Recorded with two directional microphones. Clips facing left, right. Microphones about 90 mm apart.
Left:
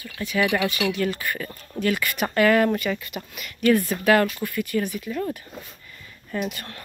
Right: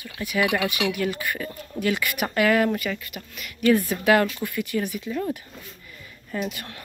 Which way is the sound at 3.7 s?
15° right (ahead or behind).